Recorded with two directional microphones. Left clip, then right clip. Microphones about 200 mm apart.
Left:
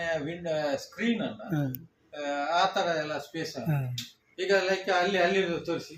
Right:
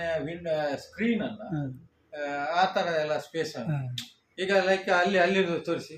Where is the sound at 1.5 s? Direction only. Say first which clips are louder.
Left 6 dB; 15° left (ahead or behind).